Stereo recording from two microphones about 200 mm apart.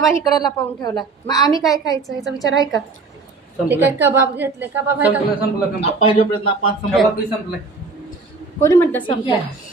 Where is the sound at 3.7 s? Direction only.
10° right (ahead or behind).